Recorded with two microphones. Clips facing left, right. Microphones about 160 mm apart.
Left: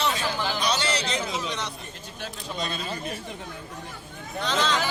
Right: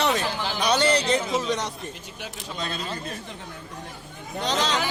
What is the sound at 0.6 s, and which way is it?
A man's voice, 55° right (ahead or behind).